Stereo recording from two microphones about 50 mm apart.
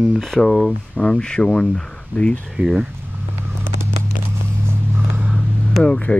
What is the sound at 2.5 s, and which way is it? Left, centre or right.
Speech, centre.